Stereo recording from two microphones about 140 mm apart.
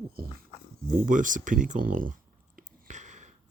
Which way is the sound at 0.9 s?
75° right (ahead or behind).